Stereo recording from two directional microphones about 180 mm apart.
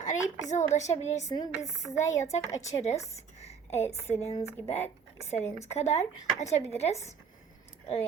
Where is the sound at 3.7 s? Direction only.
35° left (ahead or behind).